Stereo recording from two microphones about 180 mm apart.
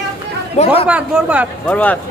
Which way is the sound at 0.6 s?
40° left (ahead or behind).